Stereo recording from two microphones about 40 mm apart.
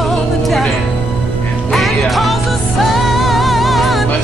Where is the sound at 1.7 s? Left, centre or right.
Centre.